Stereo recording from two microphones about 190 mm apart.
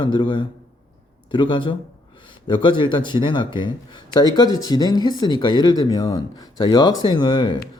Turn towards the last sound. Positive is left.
turn(degrees=25)  # may be behind; listen again after turning